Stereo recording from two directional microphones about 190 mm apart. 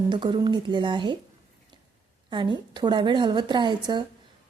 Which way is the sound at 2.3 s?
25° right (ahead or behind).